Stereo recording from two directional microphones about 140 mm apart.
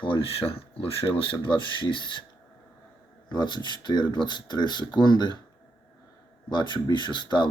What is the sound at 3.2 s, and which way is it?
Speech, 30° left (ahead or behind).